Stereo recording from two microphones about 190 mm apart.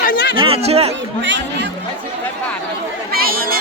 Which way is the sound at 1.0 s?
70° right (ahead or behind).